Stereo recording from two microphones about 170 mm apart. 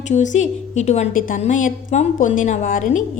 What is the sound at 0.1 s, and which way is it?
A woman's voice, 45° left (ahead or behind).